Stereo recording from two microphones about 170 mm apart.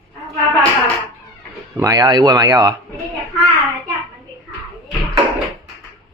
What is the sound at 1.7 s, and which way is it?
Speech, 20° right (ahead or behind).